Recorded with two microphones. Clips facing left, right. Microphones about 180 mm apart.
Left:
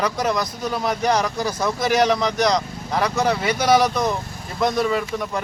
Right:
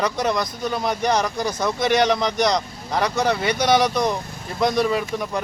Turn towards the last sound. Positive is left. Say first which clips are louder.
# even
turn(degrees=0)  # may be behind; listen again after turning